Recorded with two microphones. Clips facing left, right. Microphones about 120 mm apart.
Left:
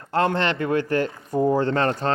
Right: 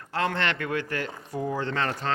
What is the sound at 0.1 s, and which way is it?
Speech, 35° left (ahead or behind).